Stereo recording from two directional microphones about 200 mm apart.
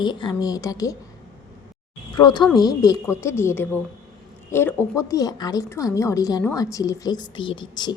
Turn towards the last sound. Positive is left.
turn(degrees=20)  # may be behind; listen again after turning